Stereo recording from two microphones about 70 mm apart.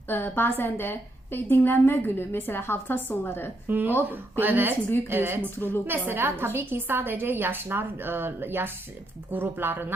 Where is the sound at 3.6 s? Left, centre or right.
Right.